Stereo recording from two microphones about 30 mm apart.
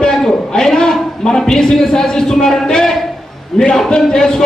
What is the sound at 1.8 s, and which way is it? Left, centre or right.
Speech, centre.